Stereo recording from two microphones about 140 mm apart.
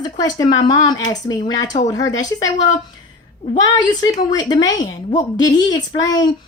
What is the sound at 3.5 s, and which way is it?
A woman's voice, 30° left (ahead or behind).